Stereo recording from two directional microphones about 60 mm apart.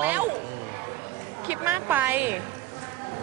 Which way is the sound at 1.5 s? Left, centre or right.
Right.